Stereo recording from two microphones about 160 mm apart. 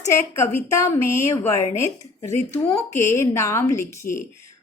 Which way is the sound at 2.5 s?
15° left (ahead or behind).